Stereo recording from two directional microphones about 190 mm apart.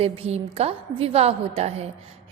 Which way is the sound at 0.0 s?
30° right (ahead or behind).